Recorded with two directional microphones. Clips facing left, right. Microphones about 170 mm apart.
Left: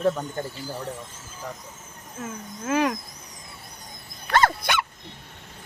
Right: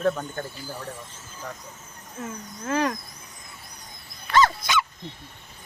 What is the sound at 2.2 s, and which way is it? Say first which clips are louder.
Speech: left 1 dB; 10° left (ahead or behind).